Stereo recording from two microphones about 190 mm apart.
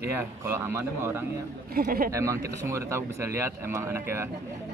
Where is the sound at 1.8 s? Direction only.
50° right (ahead or behind).